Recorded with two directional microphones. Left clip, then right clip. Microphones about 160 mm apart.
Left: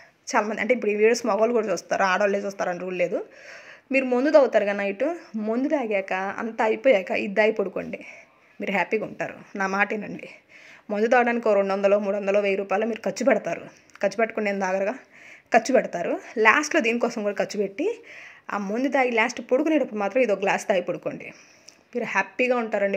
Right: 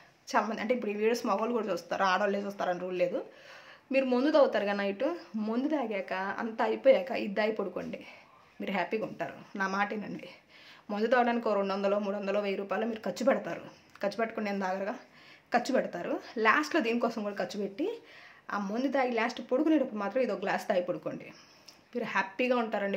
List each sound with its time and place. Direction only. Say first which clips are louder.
0.3 s a man's voice: left 7 dB; 30° left (ahead or behind)
10.9 s a man's voice: left 7 dB; 30° left (ahead or behind)